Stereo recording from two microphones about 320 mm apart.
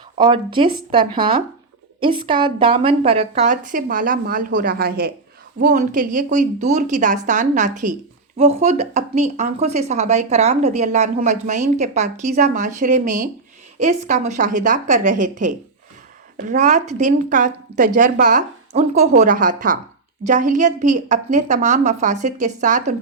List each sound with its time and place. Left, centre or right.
0.2 s speech: centre